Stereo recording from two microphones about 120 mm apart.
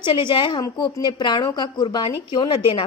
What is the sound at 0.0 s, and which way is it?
A woman's voice, 40° left (ahead or behind).